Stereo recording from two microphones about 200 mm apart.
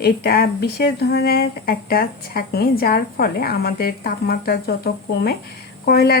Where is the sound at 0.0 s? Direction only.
50° left (ahead or behind).